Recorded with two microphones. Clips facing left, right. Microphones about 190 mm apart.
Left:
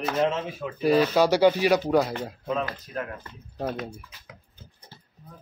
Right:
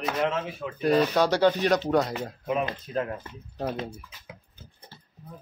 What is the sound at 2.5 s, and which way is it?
Speech, 20° right (ahead or behind).